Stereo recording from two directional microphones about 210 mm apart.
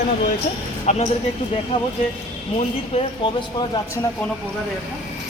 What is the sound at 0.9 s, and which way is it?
Speech, 35° left (ahead or behind).